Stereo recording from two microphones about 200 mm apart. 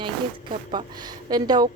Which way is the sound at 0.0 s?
25° right (ahead or behind).